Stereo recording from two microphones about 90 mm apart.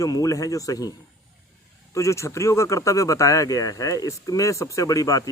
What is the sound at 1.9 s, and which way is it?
Speech, 35° left (ahead or behind).